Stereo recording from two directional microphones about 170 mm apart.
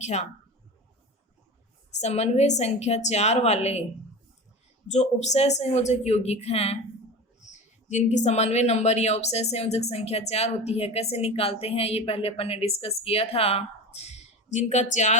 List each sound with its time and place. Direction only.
0.0 s a woman's voice: 45° left (ahead or behind)
2.0 s a woman's voice: 40° left (ahead or behind)
4.9 s a woman's voice: 40° left (ahead or behind)
7.9 s a woman's voice: 45° left (ahead or behind)